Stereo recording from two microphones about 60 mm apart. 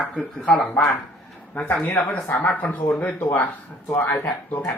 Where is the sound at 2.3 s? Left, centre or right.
Left.